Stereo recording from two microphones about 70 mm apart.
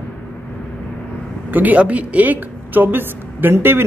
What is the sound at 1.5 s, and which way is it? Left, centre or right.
A man's voice, right.